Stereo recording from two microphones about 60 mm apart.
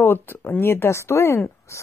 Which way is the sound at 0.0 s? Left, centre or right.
Left.